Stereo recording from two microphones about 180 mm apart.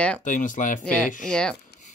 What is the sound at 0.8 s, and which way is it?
Speech, 5° left (ahead or behind).